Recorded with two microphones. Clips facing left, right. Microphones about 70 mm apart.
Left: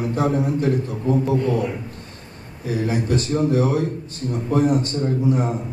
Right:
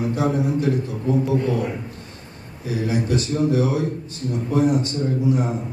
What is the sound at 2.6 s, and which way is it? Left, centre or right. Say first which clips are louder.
A man's voice: left 1 dB; left.